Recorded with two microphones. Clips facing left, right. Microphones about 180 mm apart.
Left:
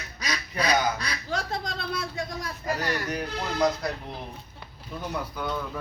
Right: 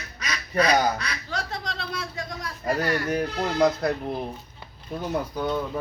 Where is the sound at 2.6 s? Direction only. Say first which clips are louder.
Right 5 dB; 50° right (ahead or behind).